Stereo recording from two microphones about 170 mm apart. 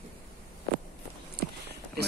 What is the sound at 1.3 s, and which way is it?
Walk, 75° right (ahead or behind).